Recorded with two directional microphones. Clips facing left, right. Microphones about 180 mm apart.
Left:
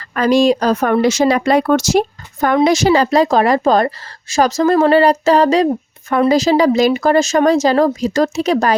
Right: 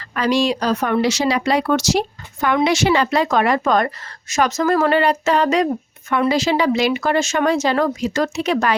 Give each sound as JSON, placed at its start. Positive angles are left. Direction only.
{"t": 0.1, "sound": "a woman's voice", "side_deg": 45}